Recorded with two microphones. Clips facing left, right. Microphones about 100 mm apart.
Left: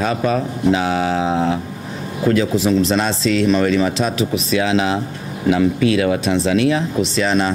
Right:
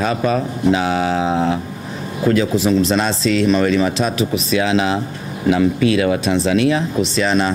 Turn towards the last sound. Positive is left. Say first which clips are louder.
# even
turn(degrees=-15)  # may be behind; listen again after turning